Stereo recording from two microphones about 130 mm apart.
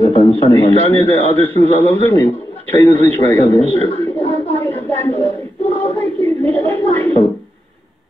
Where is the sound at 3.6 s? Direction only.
55° right (ahead or behind).